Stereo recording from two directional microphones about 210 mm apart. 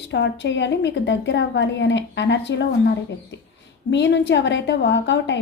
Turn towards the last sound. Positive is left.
turn(degrees=60)  # may be behind; listen again after turning